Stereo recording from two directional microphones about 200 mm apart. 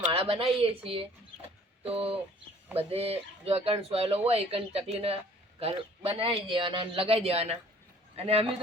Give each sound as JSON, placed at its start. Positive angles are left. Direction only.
{"t": 0.1, "sound": "a man's voice", "side_deg": -25}